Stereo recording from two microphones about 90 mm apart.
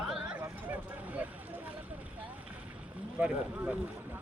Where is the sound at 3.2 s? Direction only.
15° right (ahead or behind).